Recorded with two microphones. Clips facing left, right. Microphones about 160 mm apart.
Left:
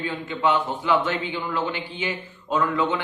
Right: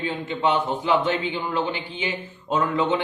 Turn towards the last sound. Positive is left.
turn(degrees=-25)  # may be behind; listen again after turning